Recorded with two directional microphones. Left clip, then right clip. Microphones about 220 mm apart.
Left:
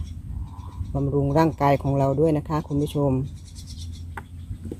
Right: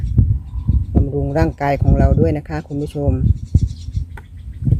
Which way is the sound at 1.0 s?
Centre (ahead or behind).